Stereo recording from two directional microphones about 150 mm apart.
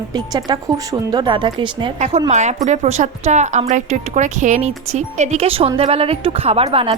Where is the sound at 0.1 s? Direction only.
25° right (ahead or behind).